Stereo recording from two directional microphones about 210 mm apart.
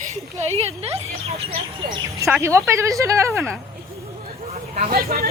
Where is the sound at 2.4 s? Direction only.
15° right (ahead or behind).